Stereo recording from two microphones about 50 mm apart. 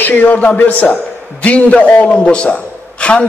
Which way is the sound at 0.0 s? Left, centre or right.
Left.